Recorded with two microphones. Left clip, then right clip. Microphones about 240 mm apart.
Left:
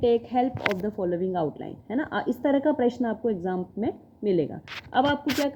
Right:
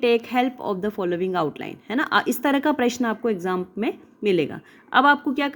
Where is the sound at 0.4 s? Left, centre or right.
Right.